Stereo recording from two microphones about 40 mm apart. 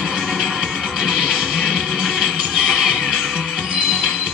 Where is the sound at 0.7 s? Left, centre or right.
Centre.